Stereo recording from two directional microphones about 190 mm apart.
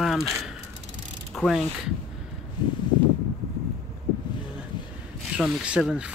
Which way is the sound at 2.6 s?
25° left (ahead or behind).